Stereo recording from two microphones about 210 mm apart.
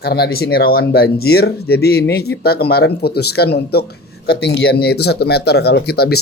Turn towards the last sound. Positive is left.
turn(degrees=50)  # may be behind; listen again after turning